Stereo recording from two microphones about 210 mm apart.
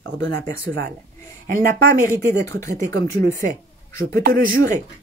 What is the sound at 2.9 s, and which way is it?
A man's voice, 50° right (ahead or behind).